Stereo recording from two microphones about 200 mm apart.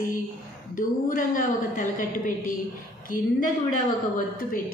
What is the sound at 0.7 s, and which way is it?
A woman's voice, 40° left (ahead or behind).